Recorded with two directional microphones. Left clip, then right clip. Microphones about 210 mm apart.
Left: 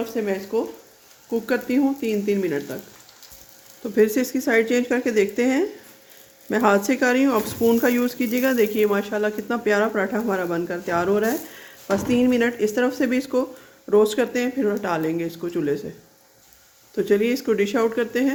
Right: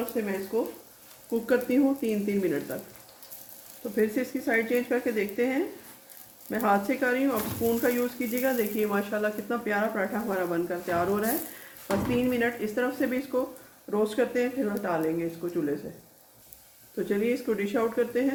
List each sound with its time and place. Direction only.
0.1 s speech: 45° left (ahead or behind)
1.3 s speech: 25° left (ahead or behind)
3.9 s speech: 55° left (ahead or behind); by 9.6 s 35° left (ahead or behind)
9.6 s speech: 55° left (ahead or behind)
12.3 s speech: 55° left (ahead or behind)
17.1 s speech: 45° left (ahead or behind)